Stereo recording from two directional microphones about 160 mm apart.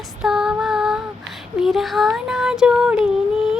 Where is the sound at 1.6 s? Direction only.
Centre (ahead or behind).